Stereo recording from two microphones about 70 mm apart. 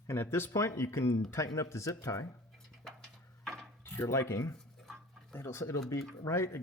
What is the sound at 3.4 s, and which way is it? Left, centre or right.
Ratchet, centre.